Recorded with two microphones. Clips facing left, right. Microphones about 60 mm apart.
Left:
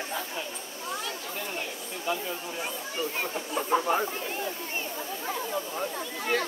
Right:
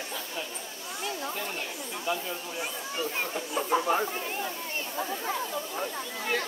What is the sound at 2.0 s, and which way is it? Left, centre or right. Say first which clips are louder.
Speech: left 1 dB; centre.